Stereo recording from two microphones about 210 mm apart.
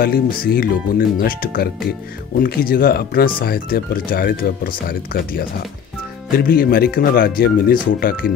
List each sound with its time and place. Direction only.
0.0 s speech: 45° left (ahead or behind)